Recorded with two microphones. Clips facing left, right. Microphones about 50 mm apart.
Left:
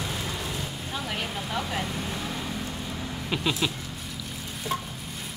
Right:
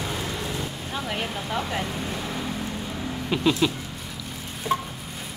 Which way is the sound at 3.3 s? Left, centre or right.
Centre.